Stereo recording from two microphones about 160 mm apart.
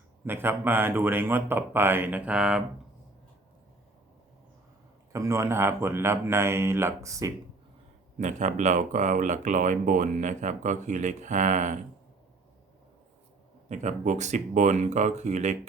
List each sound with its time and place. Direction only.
0.3 s speech: 15° right (ahead or behind)
5.1 s speech: 20° right (ahead or behind)
8.2 s speech: 50° right (ahead or behind)
13.7 s speech: 50° right (ahead or behind)